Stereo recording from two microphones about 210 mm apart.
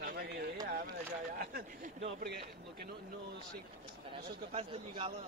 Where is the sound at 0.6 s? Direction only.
40° right (ahead or behind).